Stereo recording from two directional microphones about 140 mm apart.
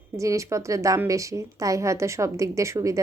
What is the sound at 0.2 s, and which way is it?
Speech, 20° right (ahead or behind).